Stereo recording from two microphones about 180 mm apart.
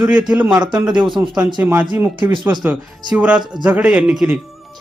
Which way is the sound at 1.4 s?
25° right (ahead or behind).